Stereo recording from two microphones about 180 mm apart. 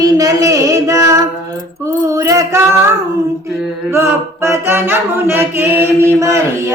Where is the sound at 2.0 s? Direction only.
20° right (ahead or behind).